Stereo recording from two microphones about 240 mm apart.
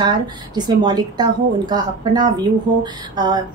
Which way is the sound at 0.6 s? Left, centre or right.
Centre.